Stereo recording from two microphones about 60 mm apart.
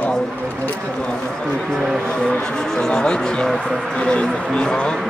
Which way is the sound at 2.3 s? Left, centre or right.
Centre.